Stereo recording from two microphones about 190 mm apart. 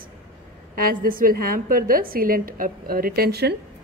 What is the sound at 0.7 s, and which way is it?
A woman's voice, 50° right (ahead or behind).